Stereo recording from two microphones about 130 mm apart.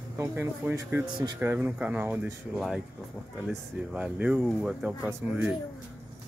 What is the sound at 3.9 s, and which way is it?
Speech, 10° right (ahead or behind).